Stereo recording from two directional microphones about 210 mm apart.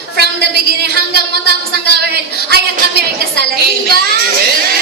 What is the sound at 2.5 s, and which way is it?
Speech, 50° right (ahead or behind).